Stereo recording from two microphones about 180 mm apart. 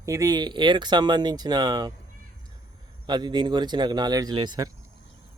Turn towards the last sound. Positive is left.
turn(degrees=-25)  # may be behind; listen again after turning